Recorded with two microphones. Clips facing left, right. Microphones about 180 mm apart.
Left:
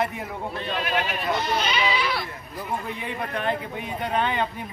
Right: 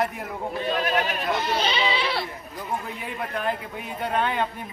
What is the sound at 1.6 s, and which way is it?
Speech, 30° right (ahead or behind).